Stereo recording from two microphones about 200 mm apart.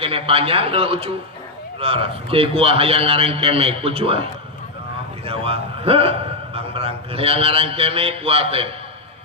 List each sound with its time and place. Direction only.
0.0 s a man's voice: 30° right (ahead or behind)